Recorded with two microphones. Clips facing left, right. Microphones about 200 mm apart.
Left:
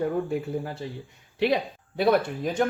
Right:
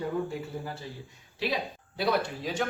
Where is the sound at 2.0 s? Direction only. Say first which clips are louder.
Left 6 dB; 55° left (ahead or behind).